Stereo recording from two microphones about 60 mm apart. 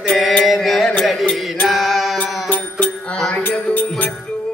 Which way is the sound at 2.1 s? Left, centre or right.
Left.